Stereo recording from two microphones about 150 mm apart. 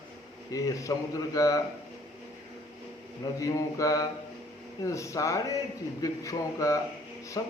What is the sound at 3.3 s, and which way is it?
A man's voice, 20° left (ahead or behind).